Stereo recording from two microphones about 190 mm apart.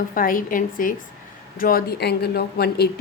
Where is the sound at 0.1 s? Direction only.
45° left (ahead or behind).